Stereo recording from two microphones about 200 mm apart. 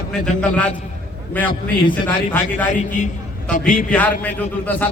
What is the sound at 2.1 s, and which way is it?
Speech, 10° left (ahead or behind).